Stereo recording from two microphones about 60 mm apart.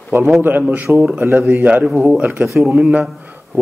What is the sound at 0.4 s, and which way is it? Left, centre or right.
Speech, right.